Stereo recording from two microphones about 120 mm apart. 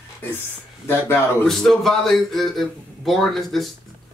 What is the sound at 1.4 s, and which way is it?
A man's voice, centre (ahead or behind).